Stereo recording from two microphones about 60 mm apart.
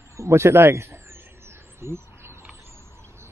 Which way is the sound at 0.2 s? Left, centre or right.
Right.